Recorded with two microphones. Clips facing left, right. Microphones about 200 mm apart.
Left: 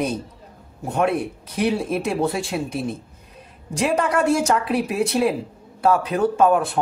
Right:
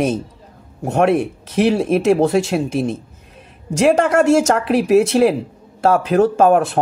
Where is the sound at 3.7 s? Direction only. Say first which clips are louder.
Right 7 dB; 85° right.